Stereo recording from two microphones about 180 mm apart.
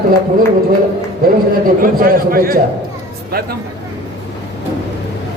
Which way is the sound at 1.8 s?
55° right (ahead or behind).